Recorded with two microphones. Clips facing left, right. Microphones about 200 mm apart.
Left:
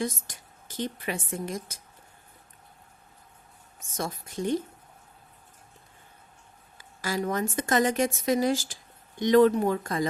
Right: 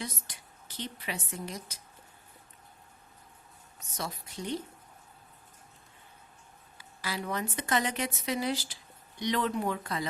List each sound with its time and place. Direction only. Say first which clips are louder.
0.0 s a woman's voice: left 9 dB; 45° left (ahead or behind)
3.8 s a woman's voice: left 5 dB; 50° left (ahead or behind)
6.7 s a woman's voice: left 7 dB; 45° left (ahead or behind)